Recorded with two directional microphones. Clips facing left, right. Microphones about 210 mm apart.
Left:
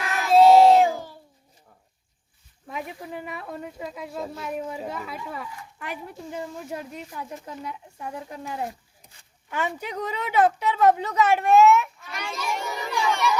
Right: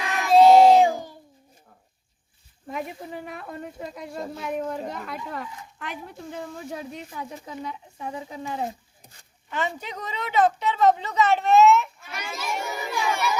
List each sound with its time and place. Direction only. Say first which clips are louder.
0.0 s child singing: even; centre (ahead or behind)
0.9 s a sound: right 1 dB; 15° right (ahead or behind)
2.6 s speech: right 2 dB; centre (ahead or behind)
12.0 s a child's voice: left 1 dB; 5° right (ahead or behind)